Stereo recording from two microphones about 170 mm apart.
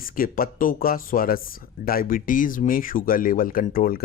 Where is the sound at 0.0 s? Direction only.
55° left (ahead or behind).